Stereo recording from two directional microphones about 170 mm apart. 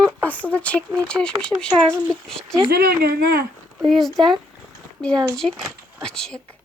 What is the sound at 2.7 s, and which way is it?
Speech, 65° right (ahead or behind).